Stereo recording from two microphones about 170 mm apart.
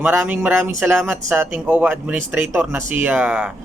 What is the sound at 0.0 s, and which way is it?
A man's voice, 10° right (ahead or behind).